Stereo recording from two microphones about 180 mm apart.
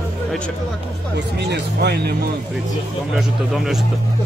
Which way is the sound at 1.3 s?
70° right (ahead or behind).